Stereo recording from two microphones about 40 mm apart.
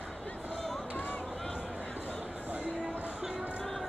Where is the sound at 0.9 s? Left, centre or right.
Left.